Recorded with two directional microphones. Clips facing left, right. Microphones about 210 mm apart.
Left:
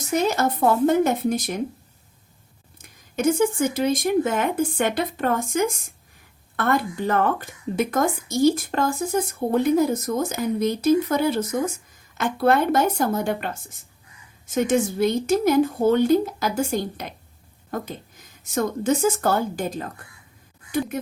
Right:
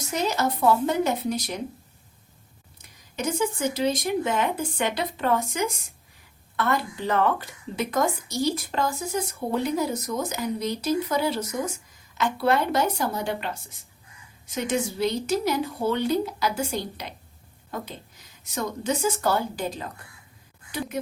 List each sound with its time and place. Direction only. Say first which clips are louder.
0.1 s a woman's voice: left 4 dB; 50° left (ahead or behind)
2.7 s a woman's voice: left 6 dB; 50° left (ahead or behind)